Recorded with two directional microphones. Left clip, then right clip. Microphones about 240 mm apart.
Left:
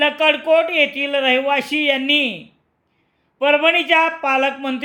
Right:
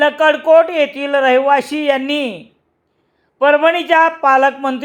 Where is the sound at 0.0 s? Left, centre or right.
Centre.